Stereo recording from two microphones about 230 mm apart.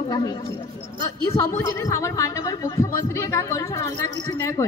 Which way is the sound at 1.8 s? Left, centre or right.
Centre.